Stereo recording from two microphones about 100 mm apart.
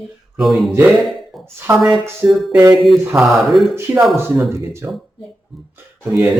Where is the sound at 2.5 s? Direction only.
15° right (ahead or behind).